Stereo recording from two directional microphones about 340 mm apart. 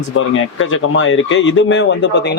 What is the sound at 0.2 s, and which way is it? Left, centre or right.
Speech, left.